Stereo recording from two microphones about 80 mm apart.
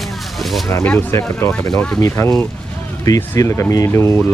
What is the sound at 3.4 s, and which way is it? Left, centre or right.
Speech, left.